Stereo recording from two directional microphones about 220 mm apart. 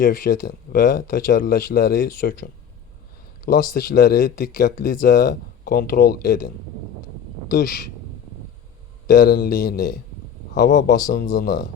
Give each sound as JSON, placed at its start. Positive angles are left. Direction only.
{"t": 0.0, "sound": "speech", "side_deg": 35}
{"t": 9.0, "sound": "speech", "side_deg": 40}